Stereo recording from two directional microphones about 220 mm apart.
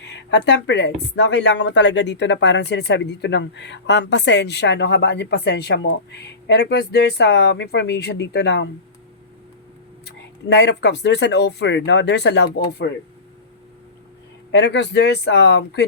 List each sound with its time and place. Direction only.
0.0 s speech: 50° left (ahead or behind)
10.5 s speech: 50° left (ahead or behind)
14.5 s speech: 50° left (ahead or behind)